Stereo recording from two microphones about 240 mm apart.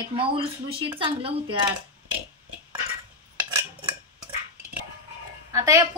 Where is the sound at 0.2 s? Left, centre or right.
Right.